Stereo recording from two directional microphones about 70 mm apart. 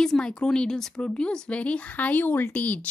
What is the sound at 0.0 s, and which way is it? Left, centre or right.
Speech, centre.